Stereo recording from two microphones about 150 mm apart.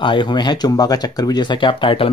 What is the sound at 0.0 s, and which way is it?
Speech, 30° left (ahead or behind).